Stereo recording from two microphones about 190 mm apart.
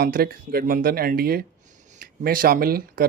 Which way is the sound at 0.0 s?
55° right (ahead or behind).